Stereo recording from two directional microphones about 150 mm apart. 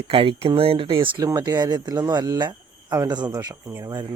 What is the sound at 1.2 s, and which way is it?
Speech, 25° right (ahead or behind).